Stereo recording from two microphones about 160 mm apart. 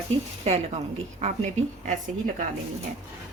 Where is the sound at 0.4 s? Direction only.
40° right (ahead or behind).